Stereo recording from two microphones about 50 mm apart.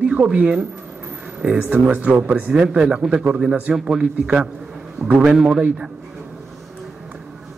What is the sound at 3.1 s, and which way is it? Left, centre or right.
A man's voice, right.